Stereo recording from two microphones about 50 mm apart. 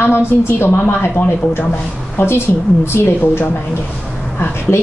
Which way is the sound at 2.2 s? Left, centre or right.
Left.